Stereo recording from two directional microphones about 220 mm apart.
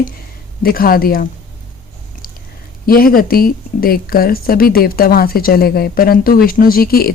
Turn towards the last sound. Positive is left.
turn(degrees=45)  # may be behind; listen again after turning